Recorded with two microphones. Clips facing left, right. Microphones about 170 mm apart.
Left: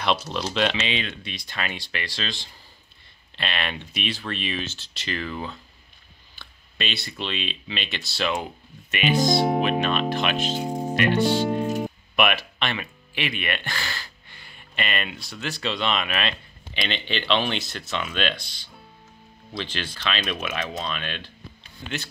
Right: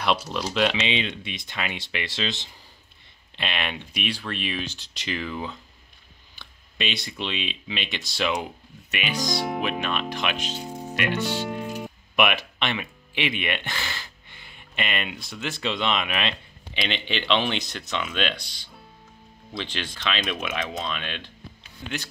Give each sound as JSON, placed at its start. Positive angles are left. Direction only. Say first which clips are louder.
{"t": 0.0, "sound": "speech", "louder": "even", "side_deg": -10}
{"t": 0.7, "sound": "speech", "louder": "right 2 dB", "side_deg": -20}
{"t": 9.1, "sound": "speech", "louder": "left 7 dB", "side_deg": 50}
{"t": 9.6, "sound": "music", "louder": "left 5 dB", "side_deg": -10}
{"t": 10.3, "sound": "speech", "louder": "left 6 dB", "side_deg": 45}
{"t": 10.6, "sound": "music", "louder": "left 7 dB", "side_deg": 35}
{"t": 11.1, "sound": "speech", "louder": "left 6 dB", "side_deg": 40}
{"t": 12.2, "sound": "speech", "louder": "even", "side_deg": -15}
{"t": 16.7, "sound": "speech", "louder": "even", "side_deg": 0}
{"t": 18.1, "sound": "speech", "louder": "left 1 dB", "side_deg": -15}
{"t": 20.2, "sound": "speech", "louder": "even", "side_deg": 0}
{"t": 21.0, "sound": "speech", "louder": "left 1 dB", "side_deg": -20}
{"t": 21.8, "sound": "speech", "louder": "even", "side_deg": -5}